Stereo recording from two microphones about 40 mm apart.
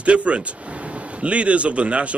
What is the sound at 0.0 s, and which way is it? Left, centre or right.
Speech, right.